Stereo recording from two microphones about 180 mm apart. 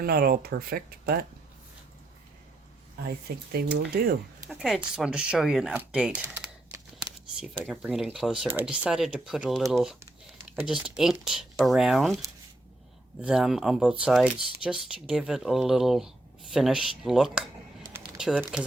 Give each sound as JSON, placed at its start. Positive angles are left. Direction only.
{"t": 0.0, "sound": "speech", "side_deg": -55}
{"t": 3.3, "sound": "speech", "side_deg": -60}
{"t": 4.4, "sound": "speech", "side_deg": 0}
{"t": 6.2, "sound": "computer keyboard", "side_deg": -15}
{"t": 7.0, "sound": "speech", "side_deg": -5}
{"t": 13.2, "sound": "speech", "side_deg": 0}